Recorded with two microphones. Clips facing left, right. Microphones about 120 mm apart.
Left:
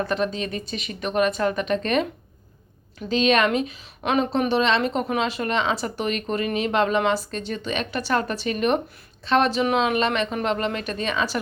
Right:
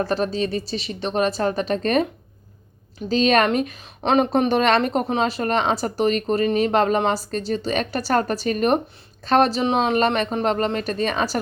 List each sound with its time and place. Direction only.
0.0 s speech: 35° right (ahead or behind)
3.1 s a woman's voice: 40° right (ahead or behind)